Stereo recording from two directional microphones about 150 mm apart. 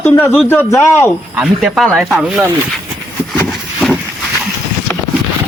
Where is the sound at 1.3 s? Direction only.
Centre (ahead or behind).